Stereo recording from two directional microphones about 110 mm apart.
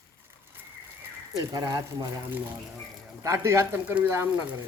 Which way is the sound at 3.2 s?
25° right (ahead or behind).